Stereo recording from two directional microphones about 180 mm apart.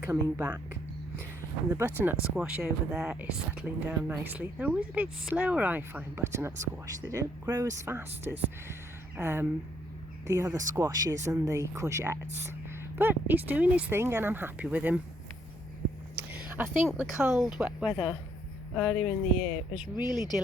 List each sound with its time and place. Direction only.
0.0 s speech: 15° right (ahead or behind)
16.1 s a sound: 10° right (ahead or behind)
16.8 s speech: 5° right (ahead or behind)
18.7 s speech: 5° left (ahead or behind)
19.7 s speech: 25° left (ahead or behind)